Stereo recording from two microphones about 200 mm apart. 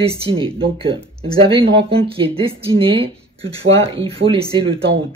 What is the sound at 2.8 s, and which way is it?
Speech, 25° right (ahead or behind).